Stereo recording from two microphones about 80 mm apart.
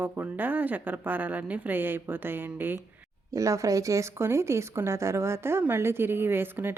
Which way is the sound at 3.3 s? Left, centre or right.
Right.